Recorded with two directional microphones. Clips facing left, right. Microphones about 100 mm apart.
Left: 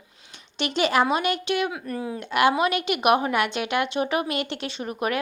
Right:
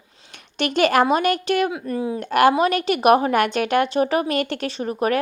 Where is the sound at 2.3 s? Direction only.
45° right (ahead or behind).